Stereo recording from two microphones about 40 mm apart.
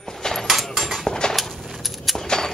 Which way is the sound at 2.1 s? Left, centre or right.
Centre.